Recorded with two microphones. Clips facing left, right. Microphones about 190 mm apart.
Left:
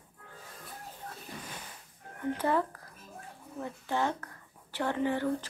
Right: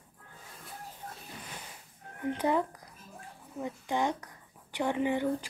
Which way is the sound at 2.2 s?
15° right (ahead or behind).